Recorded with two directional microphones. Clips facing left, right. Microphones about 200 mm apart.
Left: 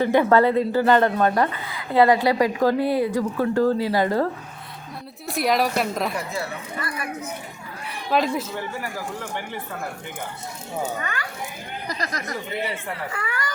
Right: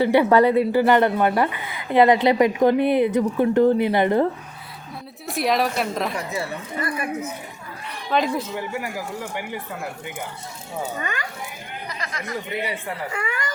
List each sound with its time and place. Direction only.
0.0 s a woman's voice: 15° right (ahead or behind)
5.2 s a woman's voice: centre (ahead or behind)
8.1 s a woman's voice: 5° left (ahead or behind)
11.0 s a woman's voice: 20° right (ahead or behind)
11.9 s speech: 40° left (ahead or behind)
12.6 s a woman's voice: 20° right (ahead or behind)